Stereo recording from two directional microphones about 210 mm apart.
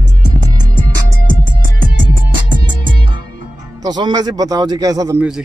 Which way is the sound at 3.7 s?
20° right (ahead or behind).